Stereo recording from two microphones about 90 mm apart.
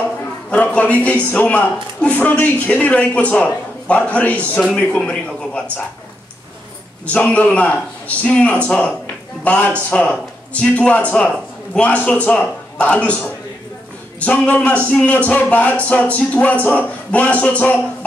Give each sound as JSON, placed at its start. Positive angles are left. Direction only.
{"t": 0.5, "sound": "a man's voice", "side_deg": 15}
{"t": 7.1, "sound": "a man's voice", "side_deg": 15}
{"t": 14.2, "sound": "a man's voice", "side_deg": 15}